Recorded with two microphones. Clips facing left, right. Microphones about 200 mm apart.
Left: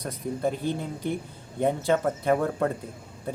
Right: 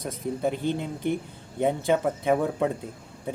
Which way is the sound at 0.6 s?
20° right (ahead or behind).